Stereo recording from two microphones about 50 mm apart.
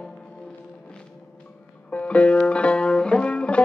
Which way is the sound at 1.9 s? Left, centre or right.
Left.